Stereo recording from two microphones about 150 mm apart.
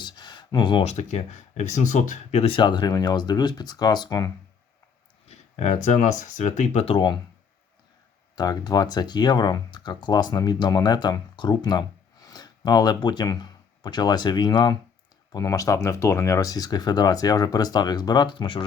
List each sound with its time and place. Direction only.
0.0 s a sound: 30° left (ahead or behind)
0.9 s speech: 50° left (ahead or behind); by 4.3 s 25° left (ahead or behind)
5.3 s speech: 50° left (ahead or behind); by 7.2 s 35° left (ahead or behind)
8.4 s speech: 25° left (ahead or behind)